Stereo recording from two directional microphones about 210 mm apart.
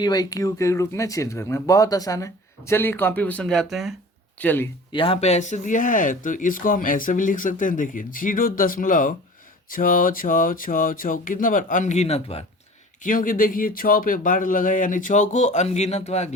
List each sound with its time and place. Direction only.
0.0 s speech: 20° left (ahead or behind)
4.9 s speech: 25° left (ahead or behind)
13.1 s speech: 40° left (ahead or behind)